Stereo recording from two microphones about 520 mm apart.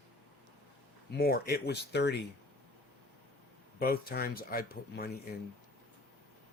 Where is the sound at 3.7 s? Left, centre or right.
Centre.